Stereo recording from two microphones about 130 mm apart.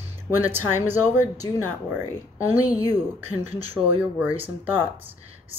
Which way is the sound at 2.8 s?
30° left (ahead or behind).